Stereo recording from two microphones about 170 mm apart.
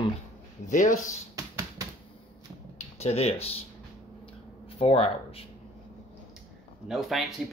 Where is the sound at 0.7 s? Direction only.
45° left (ahead or behind).